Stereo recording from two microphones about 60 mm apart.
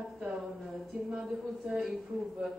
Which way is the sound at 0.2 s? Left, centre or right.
Centre.